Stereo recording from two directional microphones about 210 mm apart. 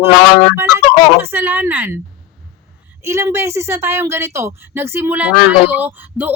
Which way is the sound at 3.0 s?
15° right (ahead or behind).